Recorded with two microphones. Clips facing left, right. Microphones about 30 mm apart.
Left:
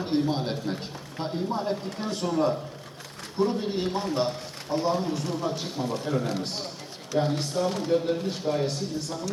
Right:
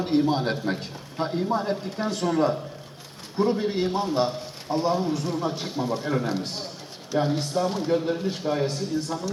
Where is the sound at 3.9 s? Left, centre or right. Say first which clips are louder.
Right 3 dB; centre.